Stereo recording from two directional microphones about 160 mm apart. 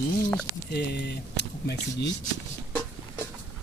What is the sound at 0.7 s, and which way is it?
Speech, 90° left.